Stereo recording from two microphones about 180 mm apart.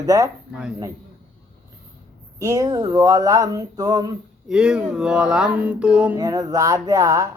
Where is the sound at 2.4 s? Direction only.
20° right (ahead or behind).